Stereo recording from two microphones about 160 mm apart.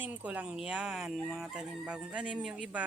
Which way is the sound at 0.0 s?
10° right (ahead or behind).